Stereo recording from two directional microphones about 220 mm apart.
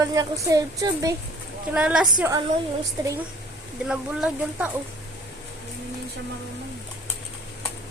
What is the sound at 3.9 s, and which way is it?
Speech, 5° right (ahead or behind).